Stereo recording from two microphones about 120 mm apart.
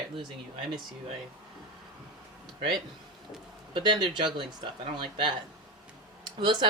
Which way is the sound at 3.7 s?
40° right (ahead or behind).